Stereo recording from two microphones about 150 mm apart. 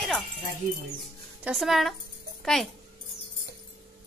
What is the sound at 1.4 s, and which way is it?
A woman's voice, centre (ahead or behind).